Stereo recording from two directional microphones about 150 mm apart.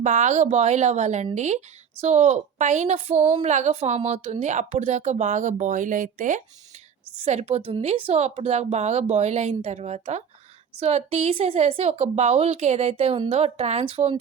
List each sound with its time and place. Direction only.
0.0 s a woman's voice: 55° right (ahead or behind)
7.3 s a woman's voice: 45° right (ahead or behind)